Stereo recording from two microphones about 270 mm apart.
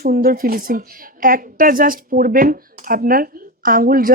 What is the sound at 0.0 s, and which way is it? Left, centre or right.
Speech, right.